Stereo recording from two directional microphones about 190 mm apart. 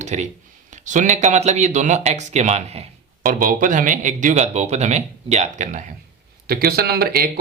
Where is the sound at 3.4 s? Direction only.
45° right (ahead or behind).